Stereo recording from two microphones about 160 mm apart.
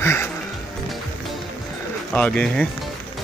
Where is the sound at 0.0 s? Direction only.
15° left (ahead or behind).